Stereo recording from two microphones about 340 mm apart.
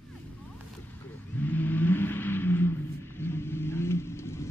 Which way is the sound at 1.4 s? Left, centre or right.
Centre.